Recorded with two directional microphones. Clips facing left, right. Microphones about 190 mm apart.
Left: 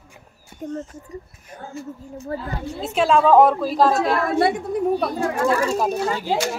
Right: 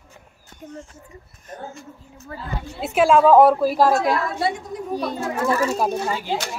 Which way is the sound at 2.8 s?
10° right (ahead or behind).